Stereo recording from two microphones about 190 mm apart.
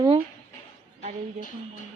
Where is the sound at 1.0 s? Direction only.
40° right (ahead or behind).